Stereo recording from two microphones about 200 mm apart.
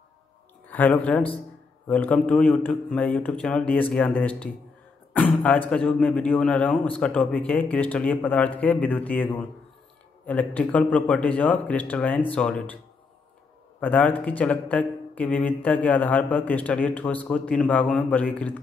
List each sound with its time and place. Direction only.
0.7 s a man's voice: 10° left (ahead or behind)
13.7 s a man's voice: 10° left (ahead or behind)